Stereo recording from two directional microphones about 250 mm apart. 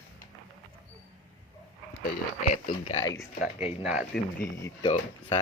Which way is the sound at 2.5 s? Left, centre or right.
Left.